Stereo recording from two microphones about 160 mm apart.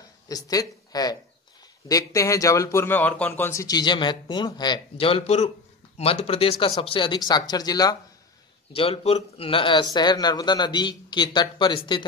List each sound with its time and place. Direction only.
0.3 s speech: 20° left (ahead or behind)
8.7 s speech: 35° left (ahead or behind)